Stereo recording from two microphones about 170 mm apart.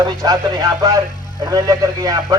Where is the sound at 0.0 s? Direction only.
20° right (ahead or behind).